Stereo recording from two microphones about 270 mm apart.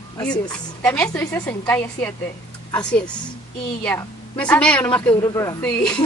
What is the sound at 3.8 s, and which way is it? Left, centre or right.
A woman's voice, centre.